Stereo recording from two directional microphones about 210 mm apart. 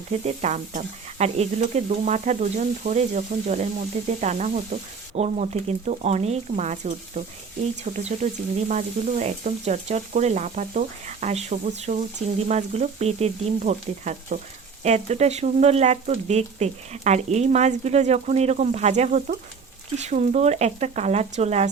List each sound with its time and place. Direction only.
0.1 s speech: 30° right (ahead or behind)